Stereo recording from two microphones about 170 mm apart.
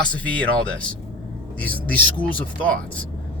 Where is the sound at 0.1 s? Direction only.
5° left (ahead or behind).